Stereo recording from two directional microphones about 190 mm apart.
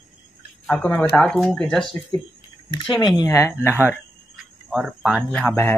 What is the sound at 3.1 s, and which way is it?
Speech, 15° left (ahead or behind).